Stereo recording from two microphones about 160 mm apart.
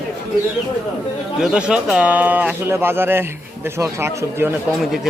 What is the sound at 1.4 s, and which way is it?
A man's voice, 5° right (ahead or behind).